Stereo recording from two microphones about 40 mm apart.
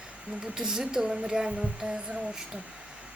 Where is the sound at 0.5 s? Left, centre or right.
Centre.